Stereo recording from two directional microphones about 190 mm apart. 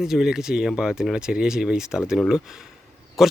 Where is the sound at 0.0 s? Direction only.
Centre (ahead or behind).